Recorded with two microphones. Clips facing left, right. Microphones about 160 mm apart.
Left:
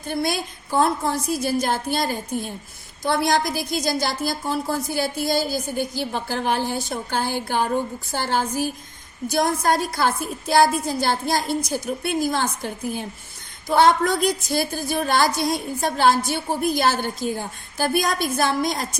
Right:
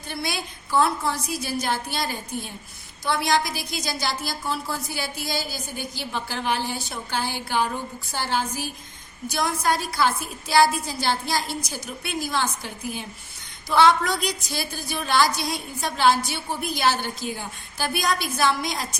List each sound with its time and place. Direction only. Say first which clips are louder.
0.1 s a woman's voice: left 6 dB; 50° left (ahead or behind)